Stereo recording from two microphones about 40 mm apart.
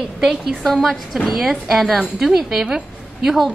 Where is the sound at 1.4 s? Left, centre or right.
Centre.